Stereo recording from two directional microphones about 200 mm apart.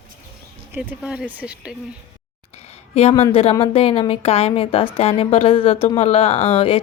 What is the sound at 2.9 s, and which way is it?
A woman's voice, 30° left (ahead or behind).